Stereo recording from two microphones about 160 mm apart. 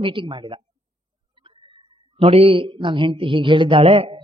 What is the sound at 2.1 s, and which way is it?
A woman's voice, 40° right (ahead or behind).